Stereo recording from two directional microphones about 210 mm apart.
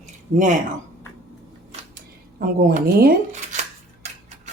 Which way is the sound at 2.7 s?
45° right (ahead or behind).